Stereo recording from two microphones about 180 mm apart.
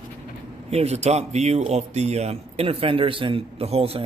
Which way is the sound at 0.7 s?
35° right (ahead or behind).